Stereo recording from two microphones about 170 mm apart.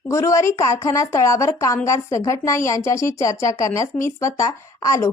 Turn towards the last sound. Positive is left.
turn(degrees=20)  # may be behind; listen again after turning